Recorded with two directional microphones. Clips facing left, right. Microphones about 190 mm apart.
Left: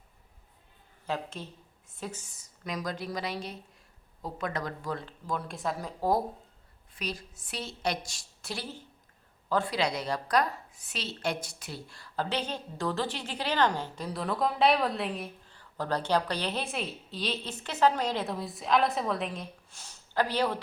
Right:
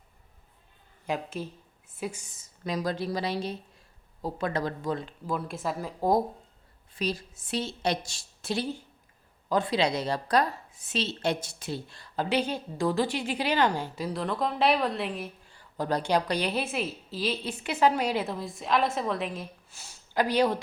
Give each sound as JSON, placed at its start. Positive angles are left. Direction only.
{"t": 1.0, "sound": "a woman's voice", "side_deg": -10}
{"t": 5.2, "sound": "speech", "side_deg": -5}
{"t": 6.0, "sound": "a woman's voice", "side_deg": -20}
{"t": 6.9, "sound": "a woman's voice", "side_deg": -30}
{"t": 15.4, "sound": "a woman's voice", "side_deg": -15}